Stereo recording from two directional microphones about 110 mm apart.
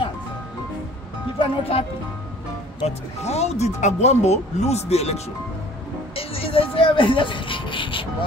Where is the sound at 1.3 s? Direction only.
55° left (ahead or behind).